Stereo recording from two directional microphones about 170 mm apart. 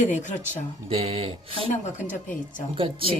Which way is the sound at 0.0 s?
45° left (ahead or behind).